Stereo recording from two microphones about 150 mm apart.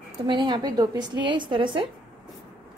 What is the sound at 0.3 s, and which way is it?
A woman's voice, 30° right (ahead or behind).